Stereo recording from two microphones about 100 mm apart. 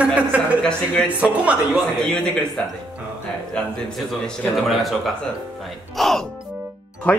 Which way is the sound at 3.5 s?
5° left (ahead or behind).